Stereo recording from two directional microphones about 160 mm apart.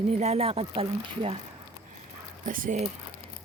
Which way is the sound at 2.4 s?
60° right (ahead or behind).